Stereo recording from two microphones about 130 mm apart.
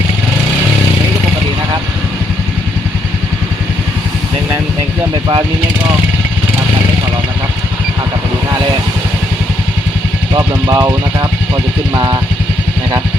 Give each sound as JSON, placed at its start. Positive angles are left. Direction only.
{"t": 10.3, "sound": "speech", "side_deg": -30}